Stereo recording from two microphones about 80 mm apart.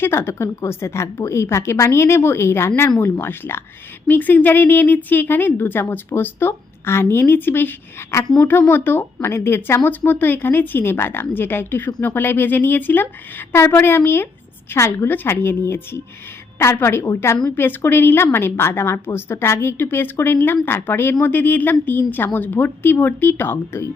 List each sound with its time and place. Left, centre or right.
0.0 s a woman's voice: left
17.6 s a woman's voice: left